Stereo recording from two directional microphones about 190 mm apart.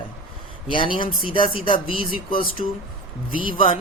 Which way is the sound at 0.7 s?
25° left (ahead or behind).